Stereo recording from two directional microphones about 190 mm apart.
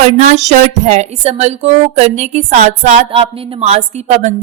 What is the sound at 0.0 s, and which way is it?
A woman's voice, 40° right (ahead or behind).